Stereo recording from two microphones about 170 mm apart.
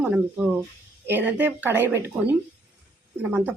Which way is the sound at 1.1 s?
10° right (ahead or behind).